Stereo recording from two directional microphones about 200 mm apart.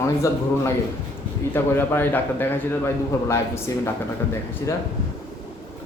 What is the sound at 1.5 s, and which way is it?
A man's voice, 10° left (ahead or behind).